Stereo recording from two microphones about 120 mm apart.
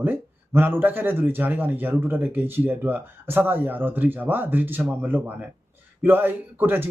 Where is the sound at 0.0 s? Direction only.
15° right (ahead or behind).